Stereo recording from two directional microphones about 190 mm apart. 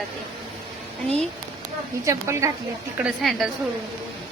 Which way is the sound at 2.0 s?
15° right (ahead or behind).